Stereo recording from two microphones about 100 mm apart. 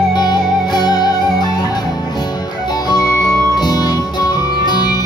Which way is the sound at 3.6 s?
45° left (ahead or behind).